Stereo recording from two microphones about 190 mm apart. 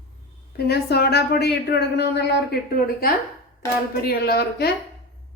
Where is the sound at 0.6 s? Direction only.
60° left (ahead or behind).